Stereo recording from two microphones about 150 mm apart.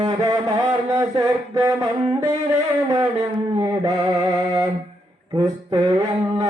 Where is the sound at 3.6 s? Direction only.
20° right (ahead or behind).